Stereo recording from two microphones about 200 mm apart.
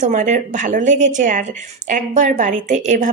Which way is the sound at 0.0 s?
35° right (ahead or behind).